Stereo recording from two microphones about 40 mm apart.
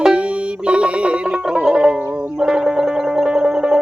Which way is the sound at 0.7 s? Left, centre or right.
Right.